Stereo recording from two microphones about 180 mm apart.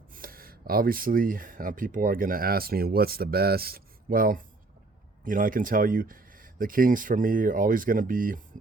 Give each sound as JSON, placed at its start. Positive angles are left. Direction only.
{"t": 0.1, "sound": "speech", "side_deg": -55}